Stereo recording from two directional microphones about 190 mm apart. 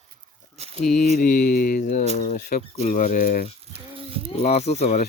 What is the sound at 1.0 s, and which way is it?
Speech, 50° left (ahead or behind).